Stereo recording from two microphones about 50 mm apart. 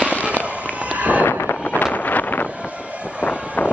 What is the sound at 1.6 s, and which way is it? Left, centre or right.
Wind noise, left.